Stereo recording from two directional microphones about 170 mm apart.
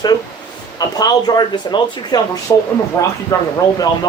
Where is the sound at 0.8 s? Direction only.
25° left (ahead or behind).